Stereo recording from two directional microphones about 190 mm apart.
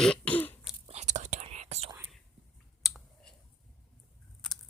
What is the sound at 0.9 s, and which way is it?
Whispering, 35° right (ahead or behind).